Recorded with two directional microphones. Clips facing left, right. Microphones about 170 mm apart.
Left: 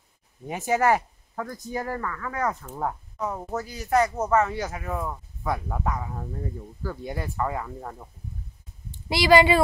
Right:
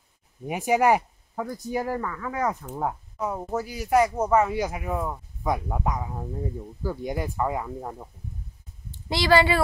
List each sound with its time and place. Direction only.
0.5 s speech: 15° right (ahead or behind)
9.1 s speech: 15° left (ahead or behind)